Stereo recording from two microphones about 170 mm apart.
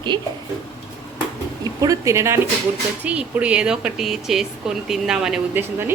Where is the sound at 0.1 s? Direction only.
25° right (ahead or behind).